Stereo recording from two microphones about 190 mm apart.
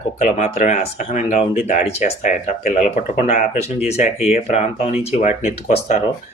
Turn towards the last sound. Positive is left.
turn(degrees=35)  # may be behind; listen again after turning